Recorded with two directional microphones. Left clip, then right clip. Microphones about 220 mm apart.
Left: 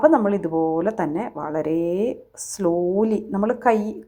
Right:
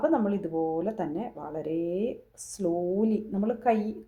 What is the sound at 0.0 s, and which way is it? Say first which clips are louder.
A woman's voice: left 10 dB; 20° left (ahead or behind).